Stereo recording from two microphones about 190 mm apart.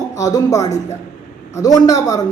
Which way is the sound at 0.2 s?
20° left (ahead or behind).